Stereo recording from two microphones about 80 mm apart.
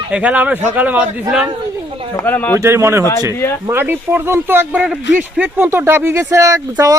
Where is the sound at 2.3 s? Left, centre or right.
Left.